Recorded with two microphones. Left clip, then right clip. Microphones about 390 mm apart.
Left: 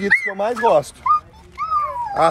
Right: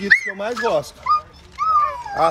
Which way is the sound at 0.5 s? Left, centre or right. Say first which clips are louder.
Left 5 dB; left.